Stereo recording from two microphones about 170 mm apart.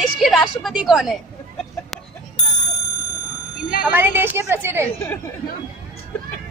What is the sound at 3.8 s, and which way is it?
Speech, 10° right (ahead or behind).